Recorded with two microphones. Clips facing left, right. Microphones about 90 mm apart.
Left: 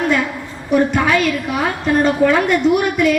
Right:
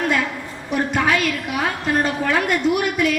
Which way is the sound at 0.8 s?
30° left (ahead or behind).